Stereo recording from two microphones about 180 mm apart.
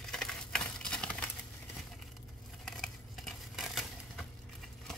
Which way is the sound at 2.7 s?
Centre (ahead or behind).